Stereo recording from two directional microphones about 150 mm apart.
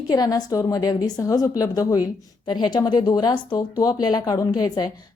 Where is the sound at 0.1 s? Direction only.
25° left (ahead or behind).